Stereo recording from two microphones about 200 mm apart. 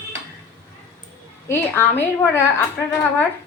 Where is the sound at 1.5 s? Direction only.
10° left (ahead or behind).